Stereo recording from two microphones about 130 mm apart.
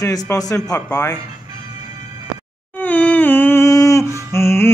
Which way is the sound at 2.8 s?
10° left (ahead or behind).